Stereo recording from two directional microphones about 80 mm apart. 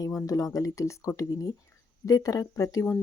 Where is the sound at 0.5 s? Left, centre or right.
Left.